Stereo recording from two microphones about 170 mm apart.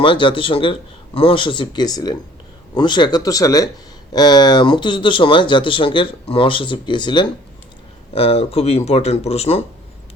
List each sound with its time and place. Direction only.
0.0 s speech: 30° left (ahead or behind)